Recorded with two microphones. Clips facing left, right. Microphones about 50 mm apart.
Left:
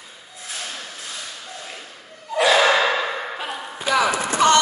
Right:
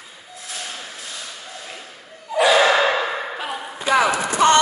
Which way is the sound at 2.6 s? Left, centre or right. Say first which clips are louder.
Right 1 dB; centre.